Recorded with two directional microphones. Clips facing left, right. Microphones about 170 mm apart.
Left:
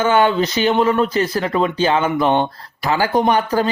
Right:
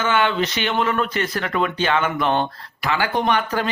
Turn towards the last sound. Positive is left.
turn(degrees=35)  # may be behind; listen again after turning